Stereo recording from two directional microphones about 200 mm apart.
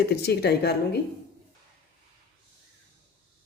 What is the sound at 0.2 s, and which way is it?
Speech, 55° left (ahead or behind).